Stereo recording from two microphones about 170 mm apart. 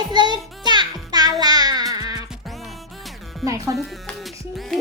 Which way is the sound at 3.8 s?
Centre (ahead or behind).